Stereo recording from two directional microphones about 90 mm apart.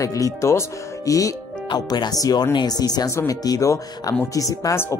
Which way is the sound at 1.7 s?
50° left (ahead or behind).